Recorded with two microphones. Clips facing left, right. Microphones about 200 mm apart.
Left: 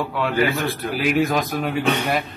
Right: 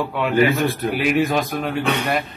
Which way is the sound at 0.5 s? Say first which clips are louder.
Right 4 dB; 20° right (ahead or behind).